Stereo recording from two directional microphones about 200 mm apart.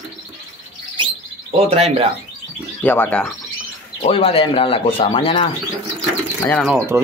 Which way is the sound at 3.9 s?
30° left (ahead or behind).